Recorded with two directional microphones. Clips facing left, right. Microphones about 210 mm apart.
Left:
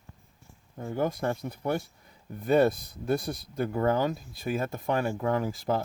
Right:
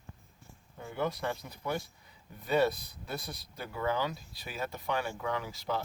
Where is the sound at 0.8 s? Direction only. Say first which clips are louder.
Left 5 dB; 45° left (ahead or behind).